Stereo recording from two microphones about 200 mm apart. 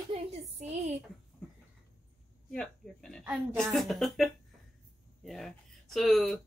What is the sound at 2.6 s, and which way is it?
A woman's voice, centre (ahead or behind).